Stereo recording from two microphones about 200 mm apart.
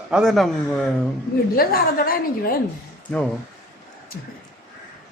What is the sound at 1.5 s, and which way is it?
A woman's voice, 45° left (ahead or behind).